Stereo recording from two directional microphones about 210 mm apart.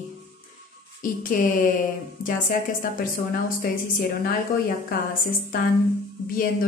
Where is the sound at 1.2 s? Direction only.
40° left (ahead or behind).